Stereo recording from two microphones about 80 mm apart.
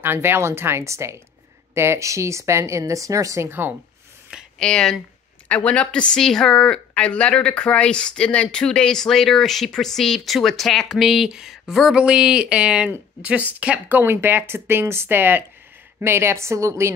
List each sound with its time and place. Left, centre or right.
0.0 s speech: right
3.4 s speech: right
4.6 s speech: centre
5.5 s speech: centre; by 16.9 s right